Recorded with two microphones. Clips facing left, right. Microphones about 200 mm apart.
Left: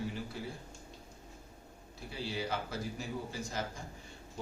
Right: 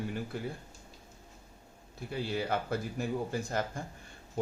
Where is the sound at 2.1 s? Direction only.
55° right (ahead or behind).